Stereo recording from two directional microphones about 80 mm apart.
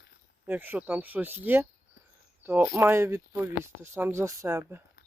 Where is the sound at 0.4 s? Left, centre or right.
Right.